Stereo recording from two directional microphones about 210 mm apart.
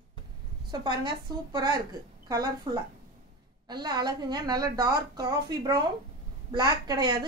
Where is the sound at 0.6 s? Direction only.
20° right (ahead or behind).